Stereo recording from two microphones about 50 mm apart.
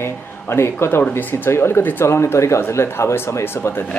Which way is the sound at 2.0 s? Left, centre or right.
Left.